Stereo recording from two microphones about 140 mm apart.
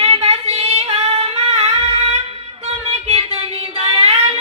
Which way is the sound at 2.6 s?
45° right (ahead or behind).